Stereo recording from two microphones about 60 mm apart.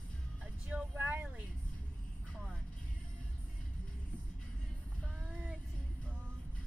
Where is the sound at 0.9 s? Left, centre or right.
Right.